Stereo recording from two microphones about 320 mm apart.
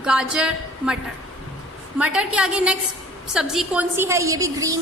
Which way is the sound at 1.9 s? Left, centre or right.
Centre.